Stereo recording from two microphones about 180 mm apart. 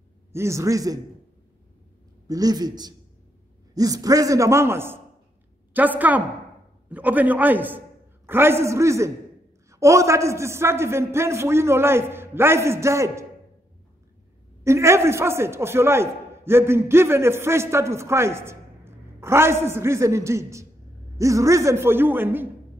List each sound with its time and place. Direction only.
0.3 s a man's voice: 15° right (ahead or behind)
2.2 s a man's voice: 20° right (ahead or behind)
14.6 s a man's voice: 15° right (ahead or behind)